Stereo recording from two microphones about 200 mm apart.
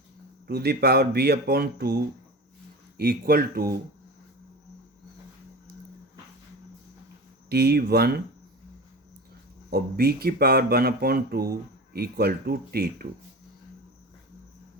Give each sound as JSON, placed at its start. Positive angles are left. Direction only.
{"t": 0.4, "sound": "speech", "side_deg": -55}
{"t": 3.0, "sound": "speech", "side_deg": -50}
{"t": 7.5, "sound": "speech", "side_deg": -50}
{"t": 9.6, "sound": "speech", "side_deg": -50}